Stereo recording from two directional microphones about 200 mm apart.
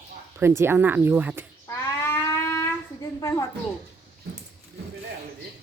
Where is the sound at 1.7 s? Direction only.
15° left (ahead or behind).